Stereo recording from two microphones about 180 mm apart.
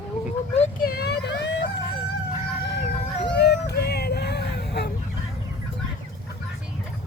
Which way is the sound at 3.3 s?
65° left (ahead or behind).